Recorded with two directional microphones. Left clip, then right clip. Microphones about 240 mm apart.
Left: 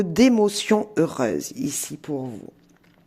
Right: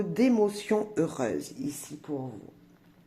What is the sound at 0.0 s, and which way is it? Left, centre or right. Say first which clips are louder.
Speech: left 7 dB; left.